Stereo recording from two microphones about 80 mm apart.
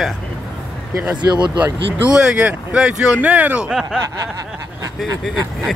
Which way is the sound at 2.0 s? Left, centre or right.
Centre.